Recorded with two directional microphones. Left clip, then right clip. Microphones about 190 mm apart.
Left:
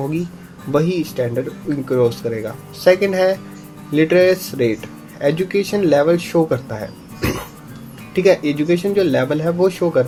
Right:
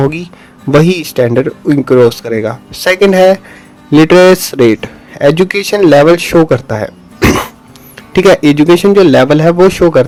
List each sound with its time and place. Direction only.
0.7 s speech: 40° right (ahead or behind)